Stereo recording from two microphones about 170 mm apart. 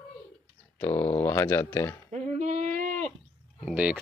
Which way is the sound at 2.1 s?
45° right (ahead or behind).